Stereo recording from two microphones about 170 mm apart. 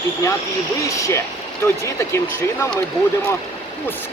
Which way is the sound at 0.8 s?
20° left (ahead or behind).